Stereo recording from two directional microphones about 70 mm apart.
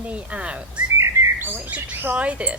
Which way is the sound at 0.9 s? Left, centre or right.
Right.